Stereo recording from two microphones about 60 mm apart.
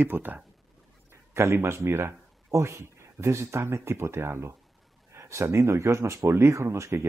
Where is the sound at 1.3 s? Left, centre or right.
Right.